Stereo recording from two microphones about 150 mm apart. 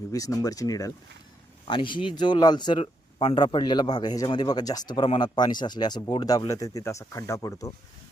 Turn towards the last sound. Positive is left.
turn(degrees=20)  # may be behind; listen again after turning